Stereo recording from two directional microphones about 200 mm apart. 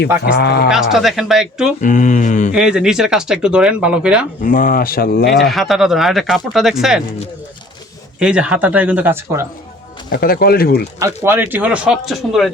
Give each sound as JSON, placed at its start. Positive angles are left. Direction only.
{"t": 0.3, "sound": "speech", "side_deg": 50}
{"t": 0.7, "sound": "speech", "side_deg": 0}
{"t": 1.8, "sound": "mantra", "side_deg": 40}
{"t": 2.5, "sound": "speech", "side_deg": -5}
{"t": 4.4, "sound": "speech", "side_deg": 45}
{"t": 5.5, "sound": "speech", "side_deg": 0}
{"t": 8.2, "sound": "speech", "side_deg": -5}
{"t": 10.1, "sound": "speech", "side_deg": 50}
{"t": 11.0, "sound": "speech", "side_deg": -10}